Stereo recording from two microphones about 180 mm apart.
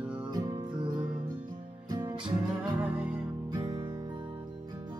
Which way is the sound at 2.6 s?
5° right (ahead or behind).